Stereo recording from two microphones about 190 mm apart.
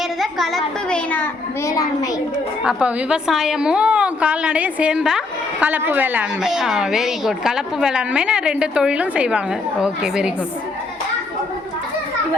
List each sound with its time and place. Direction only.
0.2 s a woman's voice: centre (ahead or behind); by 2.0 s 15° left (ahead or behind)
2.6 s a woman's voice: 5° right (ahead or behind)